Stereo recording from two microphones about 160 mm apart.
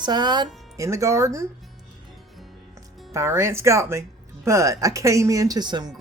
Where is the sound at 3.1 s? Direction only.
15° right (ahead or behind).